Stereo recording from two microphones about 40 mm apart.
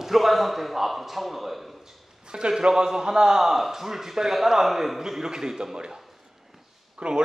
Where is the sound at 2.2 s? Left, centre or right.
Right.